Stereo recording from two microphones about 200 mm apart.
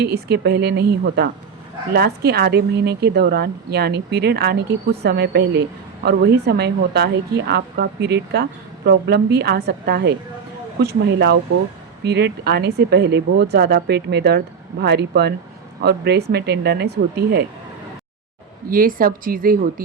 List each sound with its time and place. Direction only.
0.0 s a woman's voice: 55° right (ahead or behind)
18.7 s speech: 45° right (ahead or behind)